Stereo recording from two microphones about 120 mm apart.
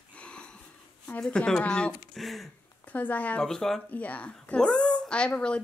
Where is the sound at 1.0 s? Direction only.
10° left (ahead or behind).